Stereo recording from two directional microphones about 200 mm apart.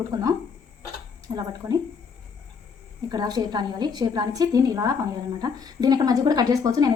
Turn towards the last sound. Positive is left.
turn(degrees=-20)  # may be behind; listen again after turning